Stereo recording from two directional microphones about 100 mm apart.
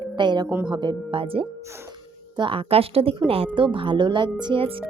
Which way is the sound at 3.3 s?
65° right (ahead or behind).